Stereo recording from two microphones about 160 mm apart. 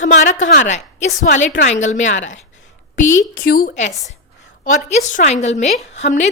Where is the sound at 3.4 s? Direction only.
65° left (ahead or behind).